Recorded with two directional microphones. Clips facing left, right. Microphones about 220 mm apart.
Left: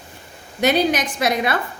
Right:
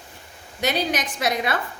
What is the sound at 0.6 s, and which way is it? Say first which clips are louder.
Speech: left 6 dB; 55° left (ahead or behind).